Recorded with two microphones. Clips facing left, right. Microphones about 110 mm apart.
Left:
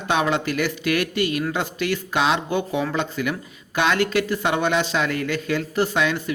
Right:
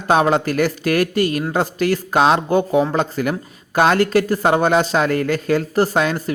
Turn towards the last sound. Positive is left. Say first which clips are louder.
# right 4 dB
turn(degrees=-40)  # may be behind; listen again after turning